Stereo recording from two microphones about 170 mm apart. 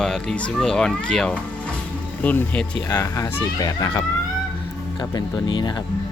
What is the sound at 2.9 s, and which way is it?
Speech, 20° left (ahead or behind).